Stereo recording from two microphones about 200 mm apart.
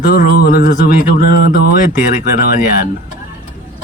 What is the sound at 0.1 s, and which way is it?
Speech, 45° left (ahead or behind).